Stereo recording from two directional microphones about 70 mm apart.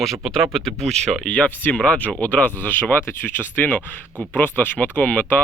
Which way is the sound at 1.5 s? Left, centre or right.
Left.